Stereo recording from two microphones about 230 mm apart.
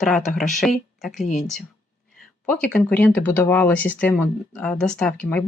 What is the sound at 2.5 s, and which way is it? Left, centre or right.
Speech, centre.